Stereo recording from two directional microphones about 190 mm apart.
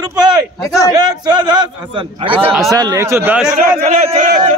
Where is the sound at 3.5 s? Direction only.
45° right (ahead or behind).